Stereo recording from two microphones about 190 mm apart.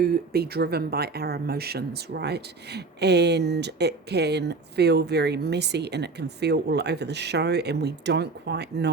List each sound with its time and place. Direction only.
0.0 s speech: 55° right (ahead or behind)